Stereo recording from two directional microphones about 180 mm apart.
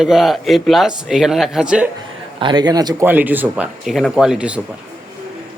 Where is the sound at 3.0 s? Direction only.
10° right (ahead or behind).